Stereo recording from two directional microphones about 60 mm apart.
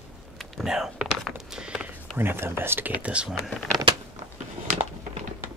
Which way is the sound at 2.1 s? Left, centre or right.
Right.